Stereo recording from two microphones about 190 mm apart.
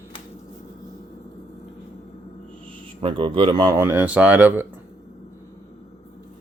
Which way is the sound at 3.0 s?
30° right (ahead or behind).